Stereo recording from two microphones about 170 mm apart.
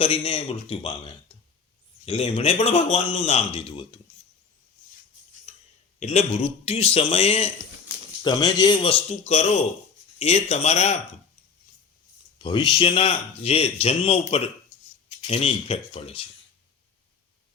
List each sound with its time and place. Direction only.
0.0 s speech: 35° left (ahead or behind)
2.0 s speech: 35° left (ahead or behind)
5.5 s a sound: 40° left (ahead or behind)
6.0 s speech: 40° left (ahead or behind)
8.2 s speech: 25° left (ahead or behind)
9.0 s speech: 40° left (ahead or behind)
12.4 s speech: 30° left (ahead or behind)